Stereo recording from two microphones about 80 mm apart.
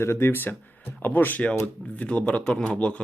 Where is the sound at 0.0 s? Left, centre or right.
Left.